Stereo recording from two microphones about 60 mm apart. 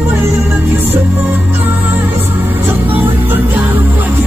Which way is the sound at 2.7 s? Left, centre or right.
Right.